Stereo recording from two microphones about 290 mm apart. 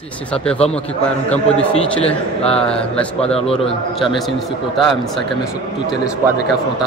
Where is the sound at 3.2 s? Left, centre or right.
Centre.